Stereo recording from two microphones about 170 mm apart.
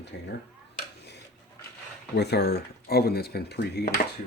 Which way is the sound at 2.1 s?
75° left (ahead or behind).